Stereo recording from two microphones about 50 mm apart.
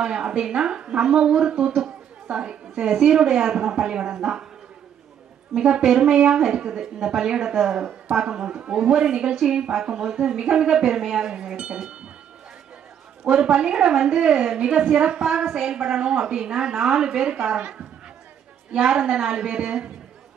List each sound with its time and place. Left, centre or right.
0.0 s a woman's voice: centre
5.5 s a woman's voice: centre
9.3 s speech: centre
9.6 s a woman's voice: centre
13.3 s a woman's voice: centre